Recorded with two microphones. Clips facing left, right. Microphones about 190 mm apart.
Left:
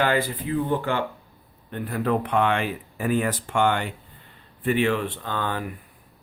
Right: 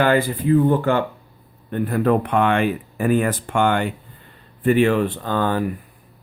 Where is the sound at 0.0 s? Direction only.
50° right (ahead or behind).